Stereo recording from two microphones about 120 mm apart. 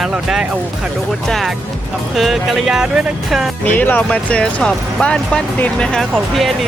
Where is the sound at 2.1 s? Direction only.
Centre (ahead or behind).